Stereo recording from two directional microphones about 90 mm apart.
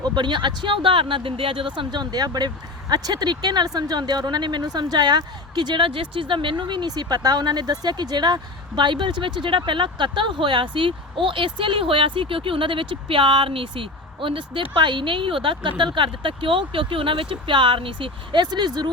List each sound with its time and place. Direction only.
0.0 s speech: 55° right (ahead or behind)